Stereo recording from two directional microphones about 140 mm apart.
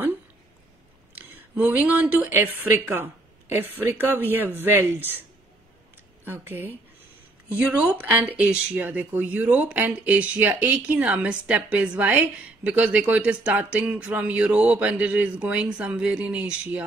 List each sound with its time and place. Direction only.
1.1 s speech: 15° right (ahead or behind)
6.2 s speech: 15° right (ahead or behind)